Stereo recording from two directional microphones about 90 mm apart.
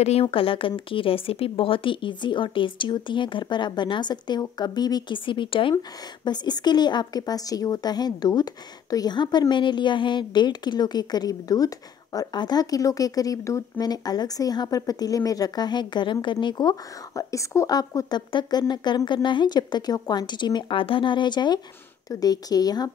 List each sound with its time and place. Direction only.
0.2 s speech: 85° left
5.8 s a woman's voice: 50° left (ahead or behind)
17.1 s a woman's voice: 35° left (ahead or behind)